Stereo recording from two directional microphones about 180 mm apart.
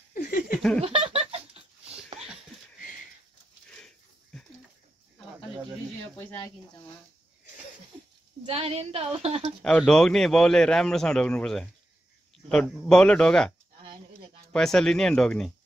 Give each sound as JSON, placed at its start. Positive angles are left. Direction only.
{"t": 0.1, "sound": "laughter", "side_deg": 50}
{"t": 0.5, "sound": "laughter", "side_deg": 5}
{"t": 0.7, "sound": "giggle", "side_deg": -30}
{"t": 3.7, "sound": "a sound", "side_deg": 5}
{"t": 8.5, "sound": "a woman's voice", "side_deg": -35}
{"t": 9.6, "sound": "a man's voice", "side_deg": 5}
{"t": 14.5, "sound": "a man's voice", "side_deg": 5}